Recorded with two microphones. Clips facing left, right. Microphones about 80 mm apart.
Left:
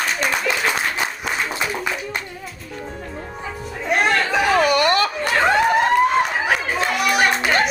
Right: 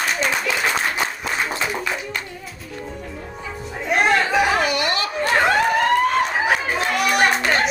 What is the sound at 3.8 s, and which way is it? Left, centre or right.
Music, centre.